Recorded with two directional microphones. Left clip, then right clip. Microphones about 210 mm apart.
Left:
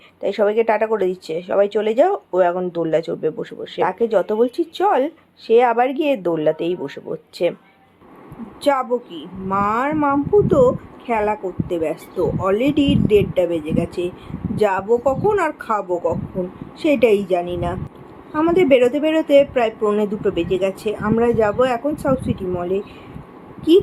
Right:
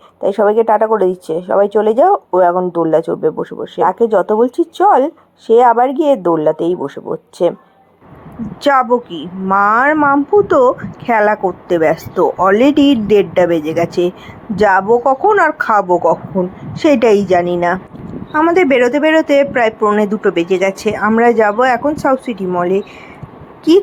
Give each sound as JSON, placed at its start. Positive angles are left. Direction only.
{"t": 0.2, "sound": "speech", "side_deg": -15}
{"t": 8.6, "sound": "speech", "side_deg": -25}